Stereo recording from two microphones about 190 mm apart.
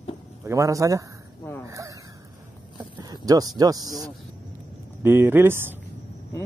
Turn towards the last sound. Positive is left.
turn(degrees=-10)  # may be behind; listen again after turning